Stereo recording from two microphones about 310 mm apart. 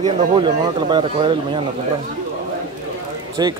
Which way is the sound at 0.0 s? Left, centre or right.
Centre.